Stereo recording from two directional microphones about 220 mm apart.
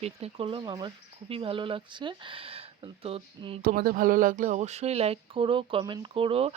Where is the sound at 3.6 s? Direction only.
40° right (ahead or behind).